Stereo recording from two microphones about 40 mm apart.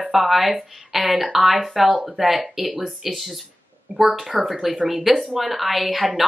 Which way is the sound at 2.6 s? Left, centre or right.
Right.